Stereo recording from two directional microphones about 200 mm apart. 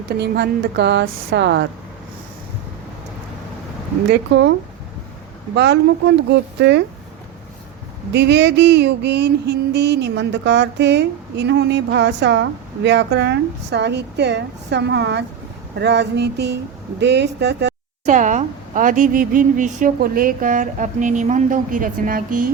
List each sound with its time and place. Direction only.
0.1 s female singing: 55° right (ahead or behind)
4.1 s female singing: 60° right (ahead or behind)
5.5 s female singing: 60° right (ahead or behind)
8.1 s female singing: 60° right (ahead or behind)
18.0 s a woman's voice: 40° right (ahead or behind)